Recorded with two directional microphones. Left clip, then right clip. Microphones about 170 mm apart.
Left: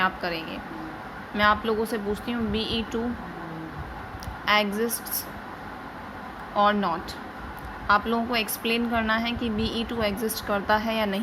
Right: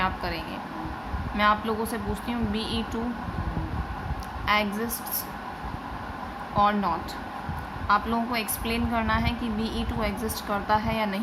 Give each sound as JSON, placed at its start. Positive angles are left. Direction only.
{"t": 0.0, "sound": "a woman's voice", "side_deg": 20}
{"t": 4.4, "sound": "a woman's voice", "side_deg": 20}
{"t": 6.6, "sound": "a woman's voice", "side_deg": 20}